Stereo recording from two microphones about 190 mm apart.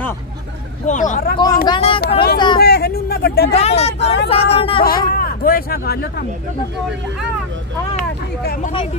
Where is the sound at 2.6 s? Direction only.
55° left (ahead or behind).